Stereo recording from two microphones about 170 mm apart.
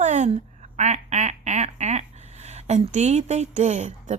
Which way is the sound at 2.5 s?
40° right (ahead or behind).